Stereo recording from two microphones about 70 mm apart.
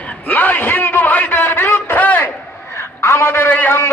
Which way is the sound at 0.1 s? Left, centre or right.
Left.